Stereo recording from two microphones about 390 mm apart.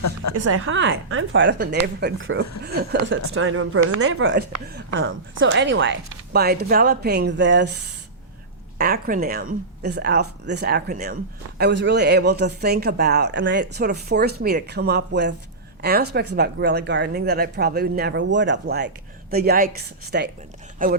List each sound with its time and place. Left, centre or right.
0.3 s speech: right
8.8 s speech: right